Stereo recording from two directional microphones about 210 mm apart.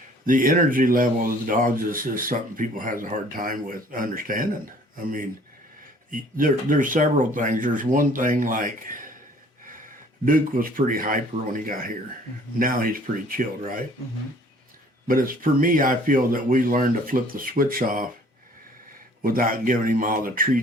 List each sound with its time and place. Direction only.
0.3 s speech: 40° right (ahead or behind)
6.1 s speech: 40° right (ahead or behind)
10.2 s speech: 40° right (ahead or behind)
15.0 s speech: 40° right (ahead or behind)
19.2 s speech: 40° right (ahead or behind)